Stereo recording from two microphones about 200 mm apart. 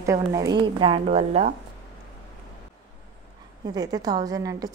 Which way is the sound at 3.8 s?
20° right (ahead or behind).